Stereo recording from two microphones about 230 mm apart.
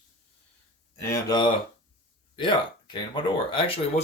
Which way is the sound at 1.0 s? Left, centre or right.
Centre.